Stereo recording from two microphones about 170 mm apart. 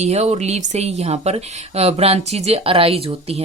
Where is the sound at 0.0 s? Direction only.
40° right (ahead or behind).